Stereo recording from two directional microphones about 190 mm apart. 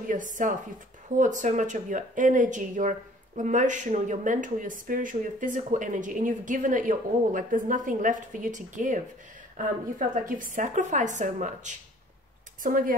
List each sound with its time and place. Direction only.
0.1 s speech: 40° right (ahead or behind)